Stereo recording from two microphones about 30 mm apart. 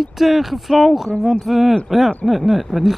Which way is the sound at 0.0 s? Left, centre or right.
Centre.